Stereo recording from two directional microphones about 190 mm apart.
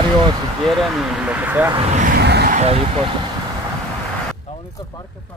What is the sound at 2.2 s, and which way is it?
Vehicle, 60° right (ahead or behind).